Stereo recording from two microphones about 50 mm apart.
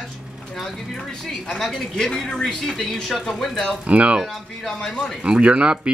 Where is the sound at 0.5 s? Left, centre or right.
Centre.